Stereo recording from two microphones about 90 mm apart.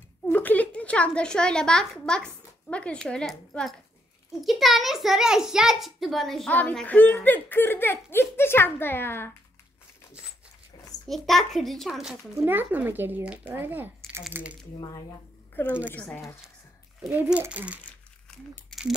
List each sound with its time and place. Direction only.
0.3 s a child's voice: 20° left (ahead or behind); by 6.5 s 5° left (ahead or behind)
6.9 s speech: 20° left (ahead or behind)
11.1 s a child's voice: centre (ahead or behind)
12.4 s a child's voice: 20° right (ahead or behind)
15.5 s a woman's voice: 20° left (ahead or behind)
17.1 s a child's voice: 20° right (ahead or behind)
18.7 s a sound: 5° right (ahead or behind)